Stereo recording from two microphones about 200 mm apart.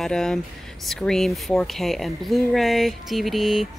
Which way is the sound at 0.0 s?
5° left (ahead or behind).